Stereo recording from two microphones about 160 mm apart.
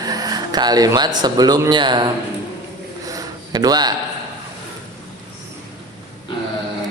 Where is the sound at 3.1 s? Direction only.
25° right (ahead or behind).